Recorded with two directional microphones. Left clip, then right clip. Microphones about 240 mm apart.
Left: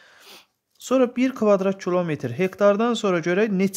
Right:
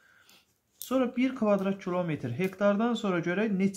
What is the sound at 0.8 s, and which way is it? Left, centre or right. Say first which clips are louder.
Speech: left 8 dB; left.